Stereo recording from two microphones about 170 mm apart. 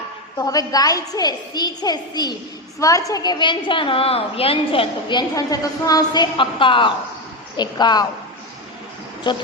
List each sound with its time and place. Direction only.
0.3 s a woman's voice: 20° left (ahead or behind)
9.3 s a woman's voice: 25° left (ahead or behind)